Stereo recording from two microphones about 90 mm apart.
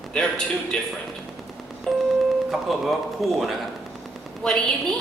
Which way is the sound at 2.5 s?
Centre (ahead or behind).